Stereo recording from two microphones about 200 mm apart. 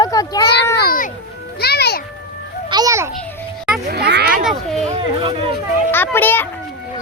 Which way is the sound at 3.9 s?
55° right (ahead or behind).